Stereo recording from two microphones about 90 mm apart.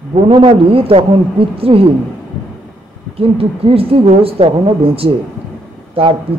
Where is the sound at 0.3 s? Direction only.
85° right.